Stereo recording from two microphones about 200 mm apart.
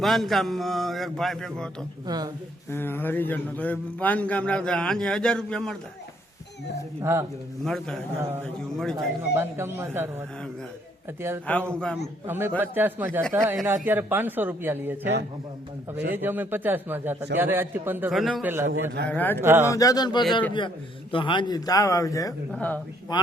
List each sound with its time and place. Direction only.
0.0 s speech: centre (ahead or behind)
2.0 s speech: 20° right (ahead or behind)
2.6 s a man's voice: 10° left (ahead or behind)
7.0 s speech: 15° right (ahead or behind)
7.6 s speech: centre (ahead or behind)
9.3 s speech: 10° right (ahead or behind)
11.5 s a man's voice: 5° left (ahead or behind)
12.2 s speech: 10° right (ahead or behind)
16.1 s speech: 10° right (ahead or behind)
18.7 s a man's voice: 65° right (ahead or behind)
19.0 s a man's voice: 10° left (ahead or behind)
19.4 s speech: 10° right (ahead or behind)
19.6 s a man's voice: 15° left (ahead or behind)
23.1 s speech: 20° left (ahead or behind)